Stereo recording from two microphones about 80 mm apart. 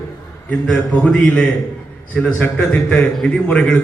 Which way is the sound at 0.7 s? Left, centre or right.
Centre.